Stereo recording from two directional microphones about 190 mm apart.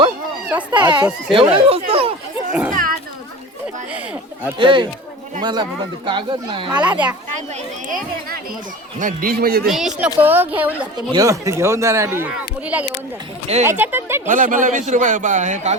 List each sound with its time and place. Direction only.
0.8 s a child's voice: 20° right (ahead or behind)
2.5 s speech: 5° right (ahead or behind)
4.5 s a child's voice: 25° right (ahead or behind)
6.7 s speech: 5° right (ahead or behind)
7.9 s a man's voice: 45° right (ahead or behind)
9.6 s speech: centre (ahead or behind)
10.9 s speech: 20° right (ahead or behind)
14.3 s a man's voice: 45° right (ahead or behind)